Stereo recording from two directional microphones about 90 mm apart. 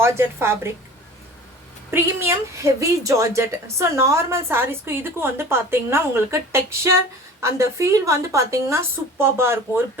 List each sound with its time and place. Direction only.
0.0 s a woman's voice: 30° right (ahead or behind)
1.9 s speech: 30° right (ahead or behind)